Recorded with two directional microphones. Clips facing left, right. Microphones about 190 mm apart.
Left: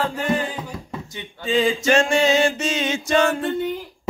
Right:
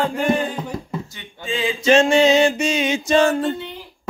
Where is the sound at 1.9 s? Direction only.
20° right (ahead or behind).